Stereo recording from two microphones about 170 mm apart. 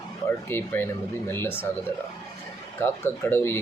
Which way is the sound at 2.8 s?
15° left (ahead or behind).